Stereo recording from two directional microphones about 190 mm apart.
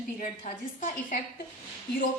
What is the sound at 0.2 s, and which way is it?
A woman's voice, 45° left (ahead or behind).